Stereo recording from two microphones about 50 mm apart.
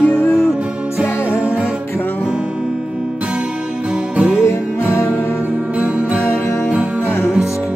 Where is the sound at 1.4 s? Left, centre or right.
Right.